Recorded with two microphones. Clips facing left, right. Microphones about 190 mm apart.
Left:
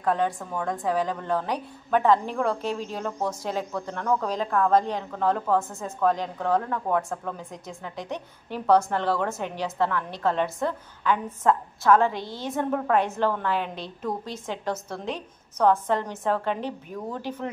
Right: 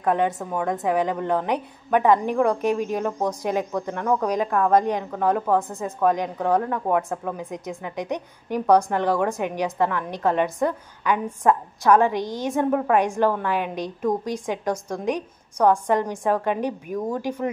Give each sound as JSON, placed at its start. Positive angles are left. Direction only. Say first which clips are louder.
{"t": 0.0, "sound": "a woman's voice", "louder": "right 3 dB", "side_deg": -15}